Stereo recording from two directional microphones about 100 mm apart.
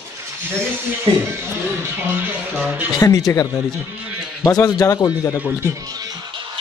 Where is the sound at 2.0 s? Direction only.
20° right (ahead or behind).